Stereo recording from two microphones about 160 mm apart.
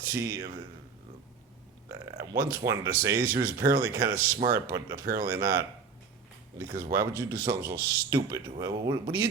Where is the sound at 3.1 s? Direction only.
65° right (ahead or behind).